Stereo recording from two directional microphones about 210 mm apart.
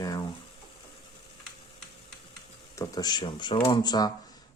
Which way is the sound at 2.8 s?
20° left (ahead or behind).